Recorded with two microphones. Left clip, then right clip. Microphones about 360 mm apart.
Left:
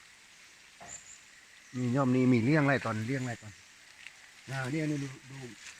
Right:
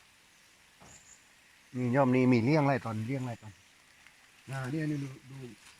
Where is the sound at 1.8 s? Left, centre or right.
Right; by 3.3 s centre.